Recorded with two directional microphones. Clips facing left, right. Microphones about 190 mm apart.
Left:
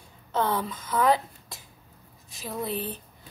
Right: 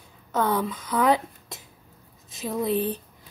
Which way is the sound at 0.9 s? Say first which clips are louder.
Right 1 dB; 20° right (ahead or behind).